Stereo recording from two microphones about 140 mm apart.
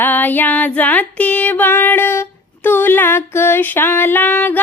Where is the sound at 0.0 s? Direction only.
15° left (ahead or behind).